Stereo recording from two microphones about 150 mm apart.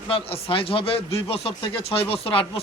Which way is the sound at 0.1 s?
40° left (ahead or behind).